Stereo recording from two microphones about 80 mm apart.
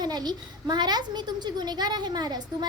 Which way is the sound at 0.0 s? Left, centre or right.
Right.